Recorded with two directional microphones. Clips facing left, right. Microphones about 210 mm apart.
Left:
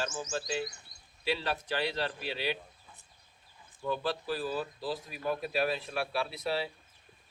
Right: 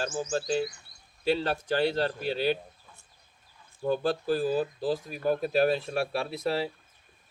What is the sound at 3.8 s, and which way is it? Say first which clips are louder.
Speech: right 6 dB; 45° right (ahead or behind).